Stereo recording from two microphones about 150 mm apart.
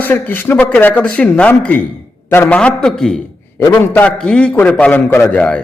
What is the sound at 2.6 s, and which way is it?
A man's voice, 5° left (ahead or behind).